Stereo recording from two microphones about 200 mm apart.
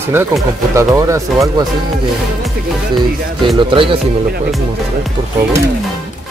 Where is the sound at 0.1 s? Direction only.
15° right (ahead or behind).